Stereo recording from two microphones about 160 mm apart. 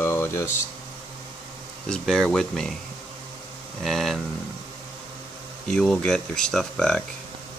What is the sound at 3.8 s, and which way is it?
Speech, centre (ahead or behind).